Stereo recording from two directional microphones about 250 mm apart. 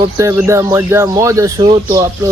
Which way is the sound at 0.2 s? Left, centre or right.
Centre.